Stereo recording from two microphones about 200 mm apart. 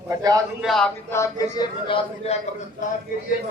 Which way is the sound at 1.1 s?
15° left (ahead or behind).